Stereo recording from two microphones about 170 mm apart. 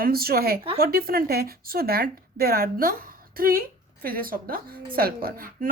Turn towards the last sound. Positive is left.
turn(degrees=-55)  # may be behind; listen again after turning